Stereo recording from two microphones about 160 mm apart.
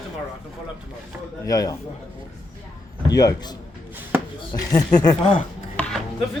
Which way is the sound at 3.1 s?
25° left (ahead or behind).